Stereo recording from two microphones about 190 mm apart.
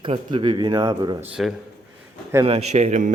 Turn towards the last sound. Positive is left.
turn(degrees=-40)  # may be behind; listen again after turning